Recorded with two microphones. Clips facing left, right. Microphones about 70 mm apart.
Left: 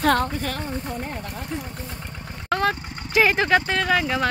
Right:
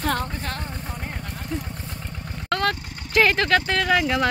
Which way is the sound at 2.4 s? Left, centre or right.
Centre.